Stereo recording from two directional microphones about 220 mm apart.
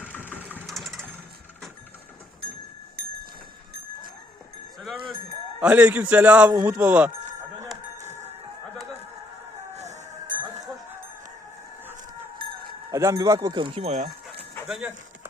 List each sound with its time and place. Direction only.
0.1 s engine: 10° left (ahead or behind)
0.5 s sewing machine: centre (ahead or behind)
5.5 s a man's voice: 5° right (ahead or behind)
8.6 s a sound: 5° left (ahead or behind)
9.7 s music: 30° right (ahead or behind)
12.9 s speech: 15° right (ahead or behind)
14.7 s a sound: 5° right (ahead or behind)